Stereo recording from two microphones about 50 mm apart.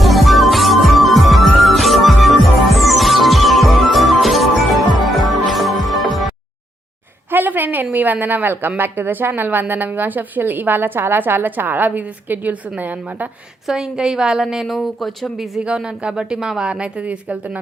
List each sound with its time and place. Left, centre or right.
0.0 s music: centre
7.3 s a sound: right
7.9 s a woman's voice: right
13.7 s a woman's voice: centre
15.6 s a woman's voice: centre